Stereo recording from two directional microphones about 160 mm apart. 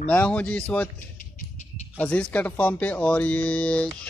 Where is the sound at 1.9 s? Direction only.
10° left (ahead or behind).